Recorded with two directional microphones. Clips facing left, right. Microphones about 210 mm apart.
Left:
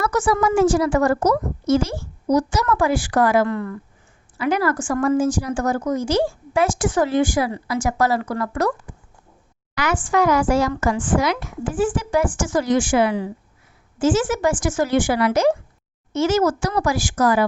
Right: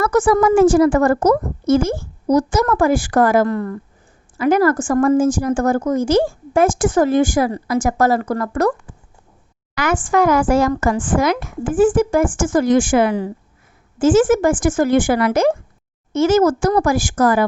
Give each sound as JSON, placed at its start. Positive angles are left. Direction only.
{"t": 0.0, "sound": "a woman's voice", "side_deg": -50}
{"t": 9.7, "sound": "a woman's voice", "side_deg": -50}